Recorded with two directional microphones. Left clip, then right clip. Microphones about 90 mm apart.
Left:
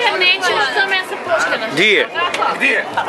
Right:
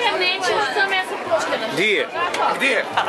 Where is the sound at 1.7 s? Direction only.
25° left (ahead or behind).